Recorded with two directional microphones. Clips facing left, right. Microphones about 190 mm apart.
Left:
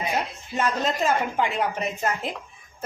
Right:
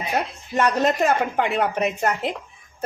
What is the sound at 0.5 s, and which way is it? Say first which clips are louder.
A woman's voice: right 5 dB; 65° right (ahead or behind).